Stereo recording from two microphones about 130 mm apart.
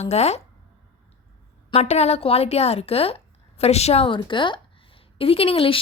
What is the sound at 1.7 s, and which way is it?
Speech, 55° left (ahead or behind).